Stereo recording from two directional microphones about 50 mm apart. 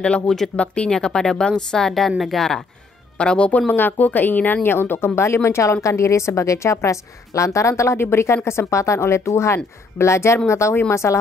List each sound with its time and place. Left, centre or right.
0.6 s a woman's voice: centre
3.2 s a woman's voice: left
5.2 s a woman's voice: left
8.5 s speech: left